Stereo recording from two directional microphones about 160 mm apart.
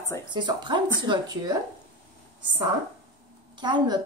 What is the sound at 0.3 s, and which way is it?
Speech, 30° right (ahead or behind).